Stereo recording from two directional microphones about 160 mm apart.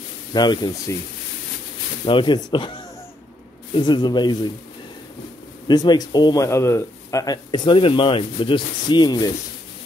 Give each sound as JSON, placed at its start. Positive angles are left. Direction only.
{"t": 0.3, "sound": "speech", "side_deg": 25}
{"t": 2.0, "sound": "speech", "side_deg": 30}
{"t": 3.7, "sound": "speech", "side_deg": 30}
{"t": 5.7, "sound": "speech", "side_deg": 25}